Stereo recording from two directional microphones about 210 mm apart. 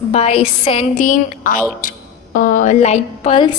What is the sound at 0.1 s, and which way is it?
A woman's voice, 30° left (ahead or behind).